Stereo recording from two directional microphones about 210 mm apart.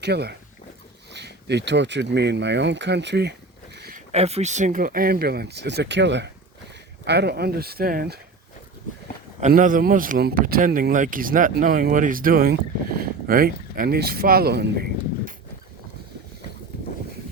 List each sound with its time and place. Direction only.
0.0 s speech: 50° right (ahead or behind)
3.8 s a sound: 45° right (ahead or behind)
4.1 s speech: 30° right (ahead or behind); by 8.2 s 45° right (ahead or behind)
9.4 s speech: 40° right (ahead or behind)